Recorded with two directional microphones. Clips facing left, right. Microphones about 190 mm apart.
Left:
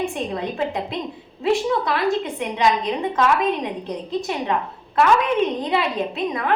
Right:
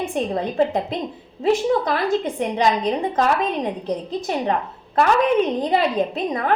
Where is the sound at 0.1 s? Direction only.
40° right (ahead or behind).